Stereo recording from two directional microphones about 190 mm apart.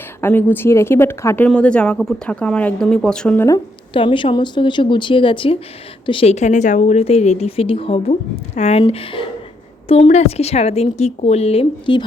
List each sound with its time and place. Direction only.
0.2 s speech: 10° left (ahead or behind)
3.9 s a woman's voice: 25° left (ahead or behind)